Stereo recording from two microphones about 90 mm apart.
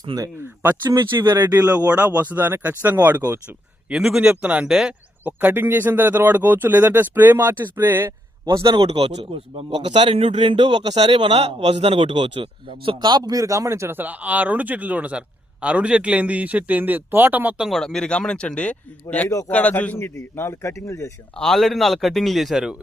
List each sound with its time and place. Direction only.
0.0 s speech: 50° right (ahead or behind)
0.3 s speech: 25° right (ahead or behind)
1.4 s speech: 45° right (ahead or behind)
1.6 s a man's voice: 15° right (ahead or behind)
3.8 s a man's voice: 5° right (ahead or behind)
5.2 s speech: 20° right (ahead or behind)
8.6 s a man's voice: 70° right (ahead or behind); by 17.5 s 20° right (ahead or behind)
17.6 s a man's voice: centre (ahead or behind); by 21.1 s 35° left (ahead or behind)
21.3 s a man's voice: 5° left (ahead or behind)